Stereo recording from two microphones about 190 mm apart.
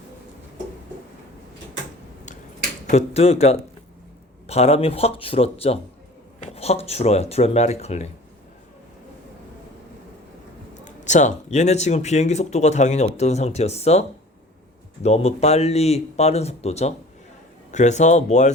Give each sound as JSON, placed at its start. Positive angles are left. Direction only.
{"t": 2.9, "sound": "speech", "side_deg": 35}
{"t": 10.8, "sound": "speech", "side_deg": 40}
{"t": 15.0, "sound": "speech", "side_deg": 35}